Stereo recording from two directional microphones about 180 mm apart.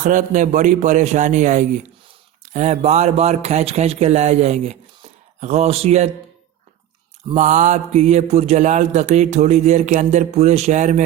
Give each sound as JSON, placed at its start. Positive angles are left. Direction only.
{"t": 0.0, "sound": "a man's voice", "side_deg": -45}
{"t": 7.3, "sound": "speech", "side_deg": -45}